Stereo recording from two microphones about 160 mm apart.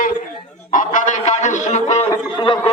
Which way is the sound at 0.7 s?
55° left (ahead or behind).